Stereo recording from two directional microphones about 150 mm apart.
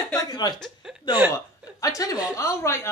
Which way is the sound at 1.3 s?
20° left (ahead or behind).